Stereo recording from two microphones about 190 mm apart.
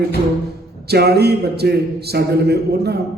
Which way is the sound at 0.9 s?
60° right (ahead or behind).